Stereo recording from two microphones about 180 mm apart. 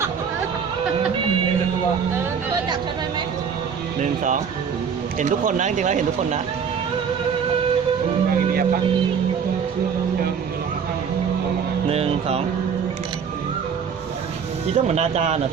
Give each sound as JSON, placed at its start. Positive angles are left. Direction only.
{"t": 4.0, "sound": "speech", "side_deg": -45}
{"t": 11.9, "sound": "speech", "side_deg": -35}
{"t": 14.7, "sound": "speech", "side_deg": -35}